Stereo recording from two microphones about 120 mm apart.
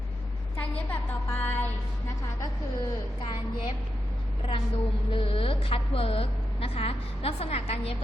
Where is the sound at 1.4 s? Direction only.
15° left (ahead or behind).